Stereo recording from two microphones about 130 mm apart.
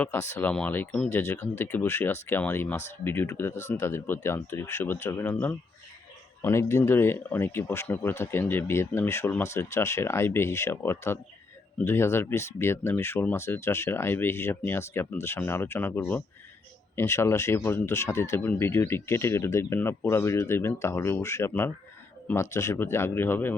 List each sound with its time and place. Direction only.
0.0 s speech: 20° left (ahead or behind)